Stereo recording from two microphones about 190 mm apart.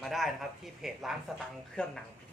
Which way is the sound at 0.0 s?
Centre (ahead or behind).